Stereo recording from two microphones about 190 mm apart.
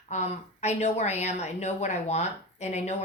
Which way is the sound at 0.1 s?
35° left (ahead or behind).